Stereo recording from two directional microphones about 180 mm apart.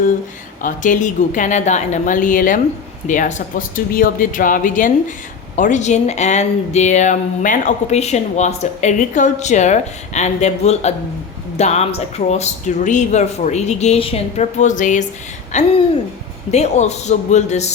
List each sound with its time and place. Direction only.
0.6 s a woman's voice: 45° left (ahead or behind)